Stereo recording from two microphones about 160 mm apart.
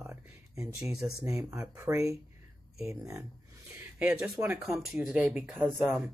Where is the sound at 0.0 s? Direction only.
15° right (ahead or behind).